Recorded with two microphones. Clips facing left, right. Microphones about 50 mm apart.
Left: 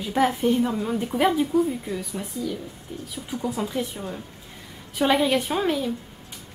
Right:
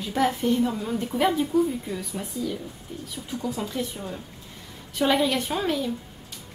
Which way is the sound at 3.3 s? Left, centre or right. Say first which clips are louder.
Left 3 dB; centre.